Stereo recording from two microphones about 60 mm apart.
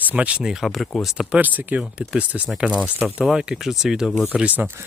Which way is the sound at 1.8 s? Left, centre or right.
Centre.